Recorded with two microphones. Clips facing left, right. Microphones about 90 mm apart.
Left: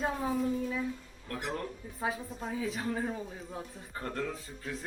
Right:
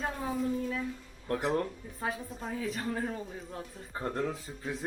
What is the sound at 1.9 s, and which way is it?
Speech, centre (ahead or behind).